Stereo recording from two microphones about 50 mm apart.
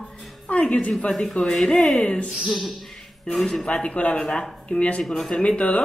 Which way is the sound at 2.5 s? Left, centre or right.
Centre.